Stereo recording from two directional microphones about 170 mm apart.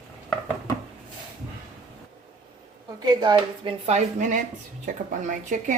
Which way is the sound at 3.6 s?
40° right (ahead or behind).